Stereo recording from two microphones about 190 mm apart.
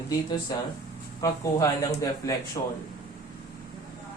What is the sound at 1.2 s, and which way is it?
Speech, 20° left (ahead or behind).